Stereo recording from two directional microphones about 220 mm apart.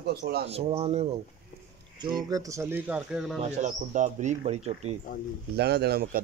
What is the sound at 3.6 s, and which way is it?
Speech, 35° right (ahead or behind).